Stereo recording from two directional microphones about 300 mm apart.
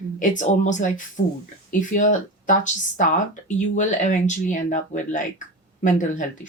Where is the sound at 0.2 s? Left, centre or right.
Left.